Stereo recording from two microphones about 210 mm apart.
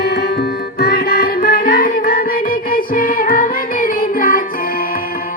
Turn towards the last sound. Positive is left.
turn(degrees=40)  # may be behind; listen again after turning